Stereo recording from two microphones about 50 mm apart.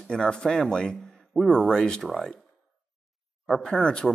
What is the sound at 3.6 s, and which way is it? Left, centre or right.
Speech, centre.